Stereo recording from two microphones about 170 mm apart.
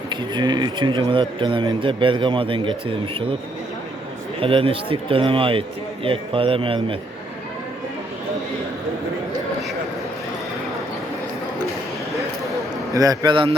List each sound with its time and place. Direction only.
0.1 s speech: 25° right (ahead or behind)
4.4 s speech: 30° right (ahead or behind)
12.9 s speech: 20° right (ahead or behind)